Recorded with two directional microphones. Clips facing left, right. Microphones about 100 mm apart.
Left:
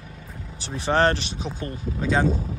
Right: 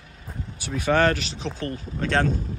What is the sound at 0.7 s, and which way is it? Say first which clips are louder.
Speech: even; 30° left (ahead or behind).